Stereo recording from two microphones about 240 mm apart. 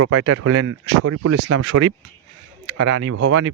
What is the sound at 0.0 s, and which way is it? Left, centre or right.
Speech, right.